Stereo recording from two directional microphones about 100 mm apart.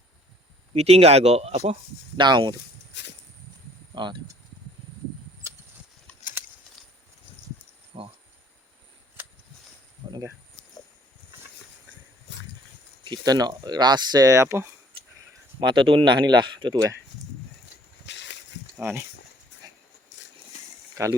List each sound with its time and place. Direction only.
0.7 s speech: 90° right
2.1 s speech: 50° right (ahead or behind)
3.9 s speech: 50° right (ahead or behind)
6.7 s a sound: centre (ahead or behind)
7.9 s cricket: 55° right (ahead or behind)
13.1 s speech: 40° right (ahead or behind); by 14.7 s 25° right (ahead or behind)
15.6 s speech: 55° right (ahead or behind); by 17.0 s 35° right (ahead or behind)
18.8 s speech: 25° right (ahead or behind)
21.0 s speech: 30° right (ahead or behind)